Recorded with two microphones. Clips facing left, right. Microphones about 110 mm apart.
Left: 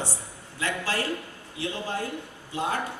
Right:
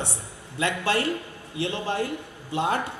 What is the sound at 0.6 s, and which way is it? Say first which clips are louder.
A man's voice: right 4 dB; 65° right (ahead or behind).